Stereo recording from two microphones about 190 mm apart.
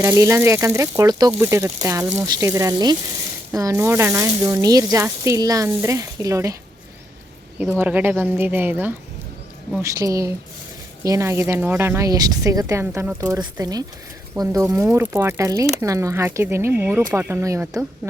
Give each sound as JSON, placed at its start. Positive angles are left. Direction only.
{"t": 0.0, "sound": "speech", "side_deg": -15}
{"t": 7.6, "sound": "speech", "side_deg": -10}